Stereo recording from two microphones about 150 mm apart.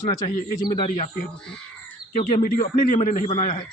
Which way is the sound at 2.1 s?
60° left (ahead or behind).